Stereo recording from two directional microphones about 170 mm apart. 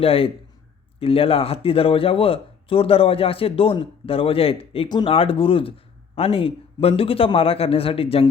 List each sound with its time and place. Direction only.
0.0 s speech: 35° left (ahead or behind)